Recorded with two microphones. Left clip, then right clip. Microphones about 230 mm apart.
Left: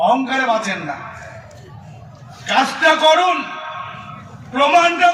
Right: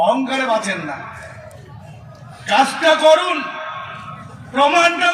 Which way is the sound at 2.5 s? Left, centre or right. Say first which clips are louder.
Even; right.